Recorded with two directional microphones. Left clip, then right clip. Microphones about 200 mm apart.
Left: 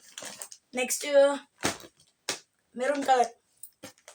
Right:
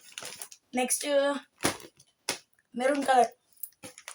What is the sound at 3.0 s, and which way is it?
Speech, 15° left (ahead or behind).